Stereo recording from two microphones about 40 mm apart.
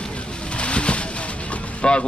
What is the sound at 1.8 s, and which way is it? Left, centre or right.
Speech, left.